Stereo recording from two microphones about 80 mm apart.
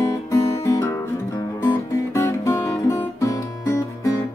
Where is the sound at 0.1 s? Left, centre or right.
Left.